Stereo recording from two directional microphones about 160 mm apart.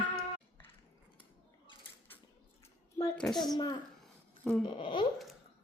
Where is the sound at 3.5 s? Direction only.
25° left (ahead or behind).